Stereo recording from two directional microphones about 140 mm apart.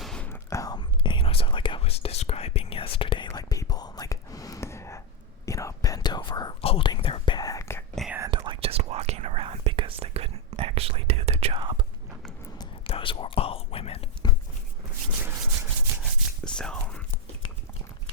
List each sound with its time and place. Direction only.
0.0 s whispering: 5° left (ahead or behind)
0.3 s whispering: 25° left (ahead or behind)
8.3 s whispering: 35° right (ahead or behind)
12.8 s whispering: 40° left (ahead or behind)
15.2 s rub: 15° right (ahead or behind)
16.0 s whispering: 5° left (ahead or behind)